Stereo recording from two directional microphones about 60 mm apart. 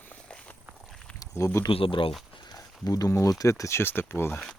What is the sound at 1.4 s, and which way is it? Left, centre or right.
Speech, left.